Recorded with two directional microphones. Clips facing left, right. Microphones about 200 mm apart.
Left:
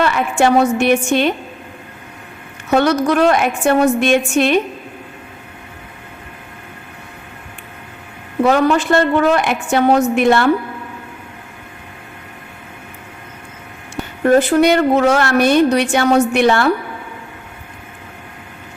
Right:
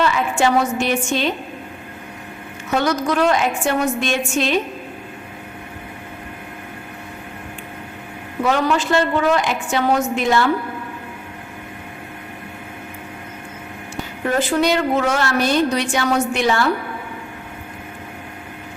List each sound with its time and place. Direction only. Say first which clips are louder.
0.0 s a woman's voice: left 3 dB; 60° left (ahead or behind)
2.6 s a woman's voice: left 5 dB; 60° left (ahead or behind)
8.4 s a woman's voice: left 5 dB; 55° left (ahead or behind)
14.3 s a woman's voice: left 7 dB; 55° left (ahead or behind)